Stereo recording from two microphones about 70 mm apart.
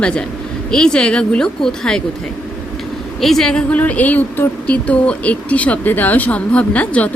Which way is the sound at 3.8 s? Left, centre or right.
Left.